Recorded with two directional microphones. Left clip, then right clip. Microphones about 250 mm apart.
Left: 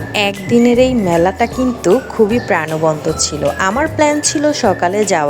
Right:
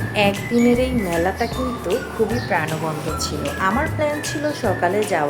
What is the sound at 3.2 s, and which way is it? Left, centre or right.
A woman's voice, left.